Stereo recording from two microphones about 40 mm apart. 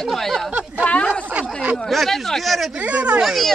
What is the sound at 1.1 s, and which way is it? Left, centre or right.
Speech, right.